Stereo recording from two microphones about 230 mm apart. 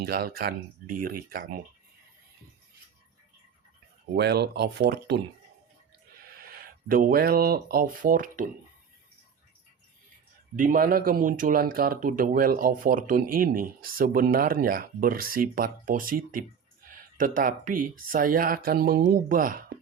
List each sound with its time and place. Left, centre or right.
0.0 s speech: right
4.1 s speech: right
6.4 s speech: right
10.5 s speech: right